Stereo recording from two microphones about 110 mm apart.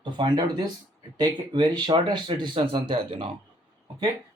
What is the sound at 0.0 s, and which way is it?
Speech, 45° right (ahead or behind).